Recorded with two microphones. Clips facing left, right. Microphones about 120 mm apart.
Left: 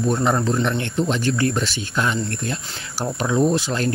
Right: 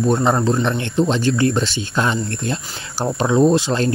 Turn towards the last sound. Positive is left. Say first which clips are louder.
# right 4 dB
turn(degrees=-25)  # may be behind; listen again after turning